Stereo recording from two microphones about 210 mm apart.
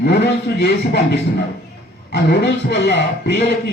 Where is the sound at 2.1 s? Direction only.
55° left (ahead or behind).